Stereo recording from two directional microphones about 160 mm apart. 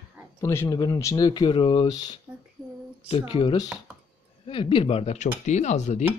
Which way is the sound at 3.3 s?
30° left (ahead or behind).